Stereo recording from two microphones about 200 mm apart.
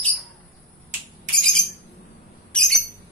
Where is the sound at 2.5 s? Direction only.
5° left (ahead or behind).